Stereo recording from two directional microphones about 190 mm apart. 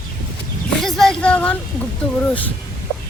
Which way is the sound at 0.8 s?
Centre (ahead or behind).